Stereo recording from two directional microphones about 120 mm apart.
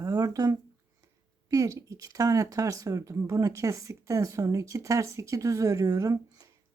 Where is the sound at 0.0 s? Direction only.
30° right (ahead or behind).